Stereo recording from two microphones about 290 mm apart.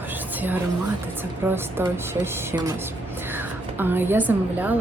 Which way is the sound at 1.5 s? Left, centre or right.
Centre.